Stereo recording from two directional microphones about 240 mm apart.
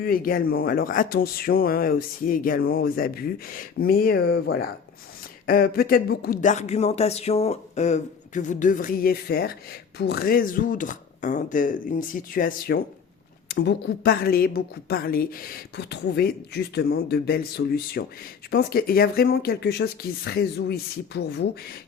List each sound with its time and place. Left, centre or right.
0.0 s a woman's voice: left